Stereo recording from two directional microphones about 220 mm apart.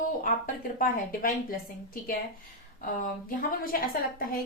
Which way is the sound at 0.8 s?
40° left (ahead or behind).